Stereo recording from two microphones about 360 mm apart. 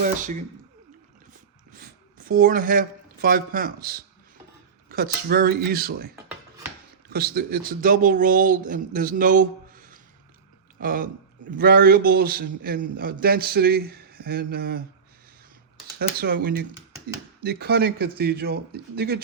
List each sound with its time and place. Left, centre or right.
0.0 s speech: right
1.3 s a sound: right
4.9 s speech: right
7.1 s speech: right
16.0 s speech: right